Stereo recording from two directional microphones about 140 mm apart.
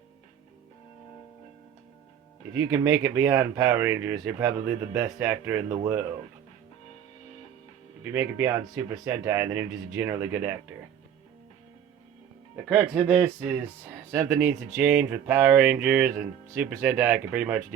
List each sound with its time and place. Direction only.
2.5 s speech: 20° right (ahead or behind)
8.1 s speech: 15° right (ahead or behind)
12.6 s speech: 5° right (ahead or behind)